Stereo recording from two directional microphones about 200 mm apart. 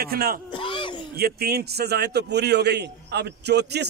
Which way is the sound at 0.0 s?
50° right (ahead or behind).